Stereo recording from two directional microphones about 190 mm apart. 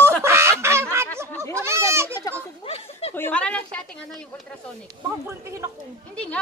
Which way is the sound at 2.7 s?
30° left (ahead or behind).